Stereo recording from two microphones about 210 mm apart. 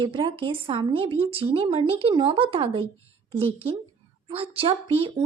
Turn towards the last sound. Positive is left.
turn(degrees=-25)  # may be behind; listen again after turning